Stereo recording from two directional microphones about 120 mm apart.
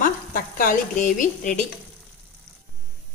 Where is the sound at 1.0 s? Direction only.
90° left.